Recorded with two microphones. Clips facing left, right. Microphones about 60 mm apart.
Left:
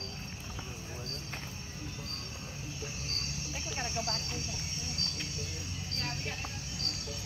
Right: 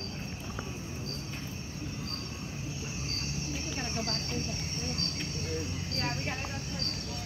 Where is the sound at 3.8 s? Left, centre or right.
Right.